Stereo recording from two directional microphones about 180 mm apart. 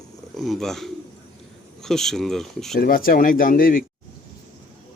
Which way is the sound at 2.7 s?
50° left (ahead or behind).